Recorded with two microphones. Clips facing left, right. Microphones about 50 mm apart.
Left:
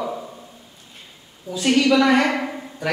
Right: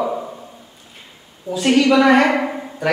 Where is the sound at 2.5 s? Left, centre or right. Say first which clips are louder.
Right 5 dB; centre.